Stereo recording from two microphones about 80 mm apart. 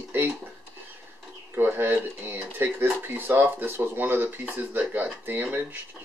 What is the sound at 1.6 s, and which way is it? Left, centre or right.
Speech, right.